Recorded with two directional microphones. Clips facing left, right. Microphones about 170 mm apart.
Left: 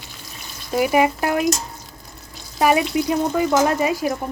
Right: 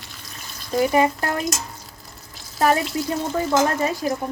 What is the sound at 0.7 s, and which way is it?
Speech, 10° left (ahead or behind).